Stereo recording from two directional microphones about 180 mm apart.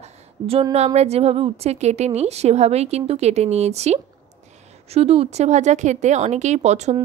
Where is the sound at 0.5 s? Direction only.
30° right (ahead or behind).